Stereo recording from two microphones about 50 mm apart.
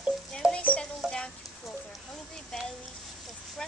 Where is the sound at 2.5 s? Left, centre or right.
Centre.